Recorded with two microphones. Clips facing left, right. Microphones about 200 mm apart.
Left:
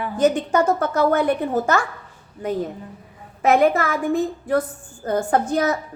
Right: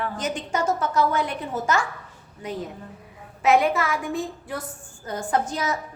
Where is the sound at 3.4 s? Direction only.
50° left (ahead or behind).